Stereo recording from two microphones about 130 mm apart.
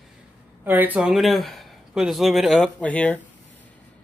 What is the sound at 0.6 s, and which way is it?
Speech, 15° right (ahead or behind).